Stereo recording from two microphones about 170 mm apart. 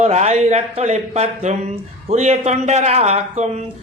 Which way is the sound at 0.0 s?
40° right (ahead or behind).